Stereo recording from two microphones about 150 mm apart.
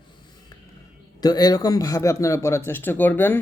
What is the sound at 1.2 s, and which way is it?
A man's voice, 25° left (ahead or behind).